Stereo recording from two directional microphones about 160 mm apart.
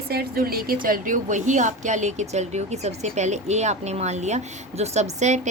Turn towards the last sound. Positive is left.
turn(degrees=-45)  # may be behind; listen again after turning